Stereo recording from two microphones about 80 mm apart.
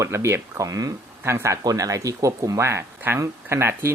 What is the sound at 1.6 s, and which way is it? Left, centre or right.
Speech, right.